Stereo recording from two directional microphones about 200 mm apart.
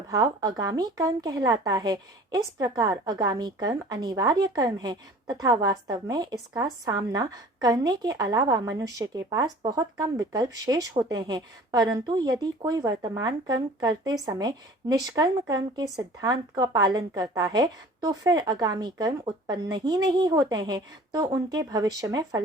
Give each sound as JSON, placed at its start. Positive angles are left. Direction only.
{"t": 0.1, "sound": "a woman's voice", "side_deg": -15}